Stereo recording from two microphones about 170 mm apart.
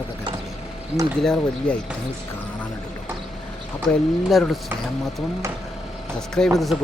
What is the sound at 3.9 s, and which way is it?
Speech, centre (ahead or behind).